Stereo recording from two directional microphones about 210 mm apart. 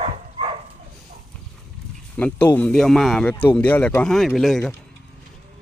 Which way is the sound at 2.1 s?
10° left (ahead or behind).